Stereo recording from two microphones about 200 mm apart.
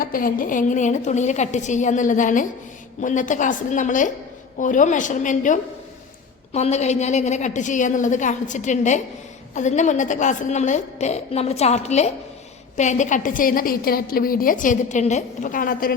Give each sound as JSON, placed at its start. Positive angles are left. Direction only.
{"t": 0.0, "sound": "a woman's voice", "side_deg": 45}